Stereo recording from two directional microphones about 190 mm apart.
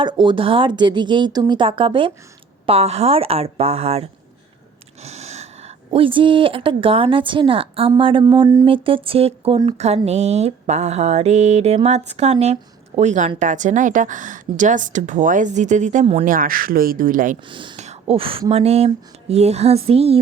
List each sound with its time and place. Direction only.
0.0 s a woman's voice: 25° right (ahead or behind)
16.2 s speech: 45° right (ahead or behind)
17.5 s a woman's voice: 25° right (ahead or behind)